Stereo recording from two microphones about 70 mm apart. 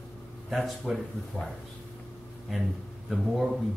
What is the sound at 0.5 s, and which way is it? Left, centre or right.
Speech, centre.